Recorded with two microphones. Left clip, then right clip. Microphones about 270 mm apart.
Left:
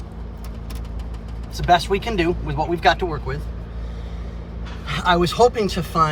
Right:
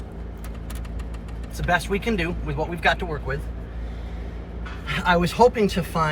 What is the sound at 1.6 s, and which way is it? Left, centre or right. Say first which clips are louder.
Speech: left 5 dB; left.